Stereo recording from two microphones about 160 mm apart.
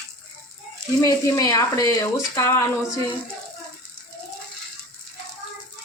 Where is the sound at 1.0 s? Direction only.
20° left (ahead or behind).